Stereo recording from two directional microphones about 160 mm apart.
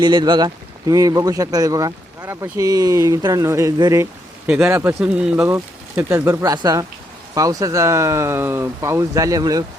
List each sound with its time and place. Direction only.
0.0 s speech: 30° right (ahead or behind); by 5.5 s 5° right (ahead or behind)
5.5 s speech: 20° right (ahead or behind)